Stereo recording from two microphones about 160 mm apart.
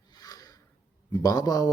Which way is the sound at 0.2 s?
25° left (ahead or behind).